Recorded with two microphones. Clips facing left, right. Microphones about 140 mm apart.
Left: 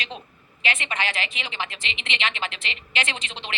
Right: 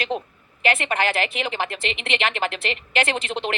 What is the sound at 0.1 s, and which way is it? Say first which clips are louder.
A woman's voice: right 10 dB; 60° right (ahead or behind).